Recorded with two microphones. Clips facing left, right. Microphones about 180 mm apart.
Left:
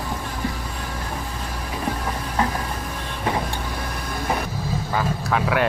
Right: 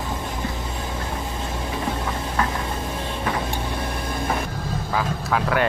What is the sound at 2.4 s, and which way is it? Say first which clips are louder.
Music: left 2 dB; 25° left (ahead or behind).